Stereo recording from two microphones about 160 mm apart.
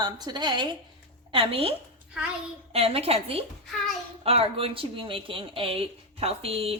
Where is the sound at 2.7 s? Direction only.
35° right (ahead or behind).